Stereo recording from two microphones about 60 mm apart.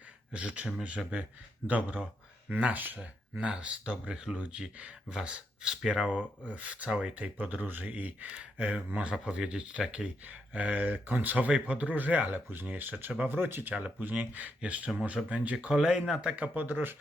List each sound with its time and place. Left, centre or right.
0.3 s speech: right
3.3 s speech: centre
9.1 s speech: centre
15.7 s speech: centre
16.3 s speech: right